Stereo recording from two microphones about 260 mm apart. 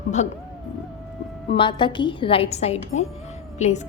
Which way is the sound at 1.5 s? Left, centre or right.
Centre.